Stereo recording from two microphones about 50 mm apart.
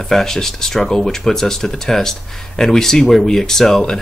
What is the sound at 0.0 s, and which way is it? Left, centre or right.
Speech, centre.